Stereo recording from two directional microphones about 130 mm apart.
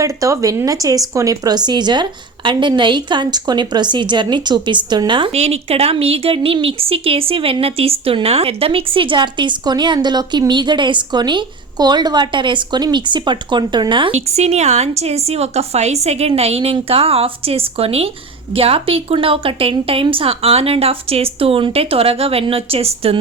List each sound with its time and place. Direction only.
0.0 s a woman's voice: 25° right (ahead or behind)
5.3 s a woman's voice: 55° right (ahead or behind); by 14.1 s 35° right (ahead or behind)
14.1 s a woman's voice: 55° right (ahead or behind)